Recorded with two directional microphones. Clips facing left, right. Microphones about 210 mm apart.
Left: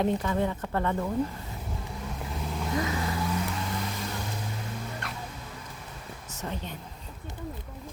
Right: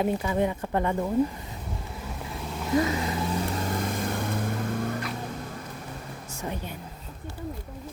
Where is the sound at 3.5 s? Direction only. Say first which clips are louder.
Right 4 dB; 45° right (ahead or behind).